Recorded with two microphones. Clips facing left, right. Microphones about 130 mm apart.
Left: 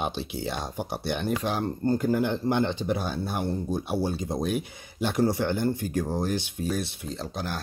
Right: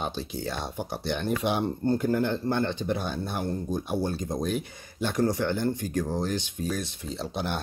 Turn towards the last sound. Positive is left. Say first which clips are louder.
# right 1 dB
turn(degrees=0)  # may be behind; listen again after turning